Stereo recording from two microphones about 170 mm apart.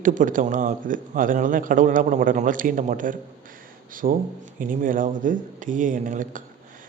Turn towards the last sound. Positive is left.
turn(degrees=-50)  # may be behind; listen again after turning